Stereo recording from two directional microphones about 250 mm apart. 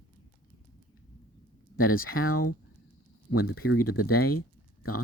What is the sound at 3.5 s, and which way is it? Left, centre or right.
Speech, left.